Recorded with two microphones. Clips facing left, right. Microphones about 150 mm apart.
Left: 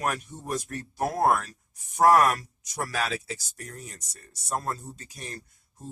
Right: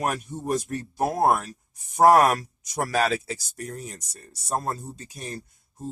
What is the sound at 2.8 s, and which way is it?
Speech, 45° right (ahead or behind).